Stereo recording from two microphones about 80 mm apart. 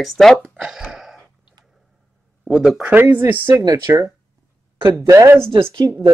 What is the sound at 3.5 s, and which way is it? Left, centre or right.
Speech, right.